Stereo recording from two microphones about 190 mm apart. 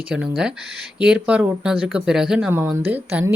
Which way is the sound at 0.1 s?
5° right (ahead or behind).